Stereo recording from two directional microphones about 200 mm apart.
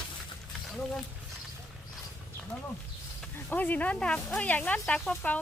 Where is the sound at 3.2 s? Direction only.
10° left (ahead or behind).